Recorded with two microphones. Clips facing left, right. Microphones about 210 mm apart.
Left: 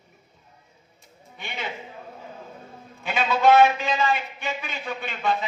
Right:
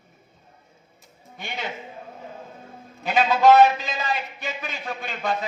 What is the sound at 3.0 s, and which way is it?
A man's voice, 40° right (ahead or behind).